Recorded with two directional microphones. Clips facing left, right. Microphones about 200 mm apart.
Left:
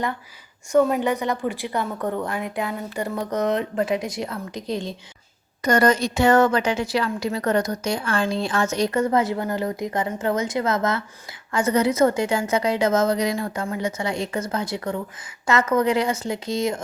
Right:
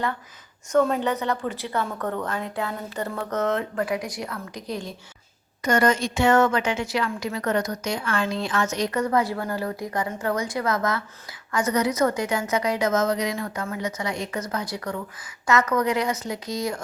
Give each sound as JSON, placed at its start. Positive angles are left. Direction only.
{"t": 0.7, "sound": "a woman's voice", "side_deg": 10}
{"t": 5.6, "sound": "a woman's voice", "side_deg": 35}